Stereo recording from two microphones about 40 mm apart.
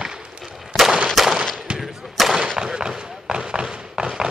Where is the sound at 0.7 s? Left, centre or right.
Centre.